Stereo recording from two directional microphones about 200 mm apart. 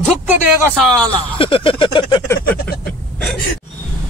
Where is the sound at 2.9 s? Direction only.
5° left (ahead or behind).